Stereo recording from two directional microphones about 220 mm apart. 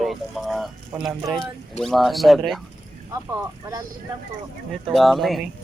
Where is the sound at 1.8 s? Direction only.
Centre (ahead or behind).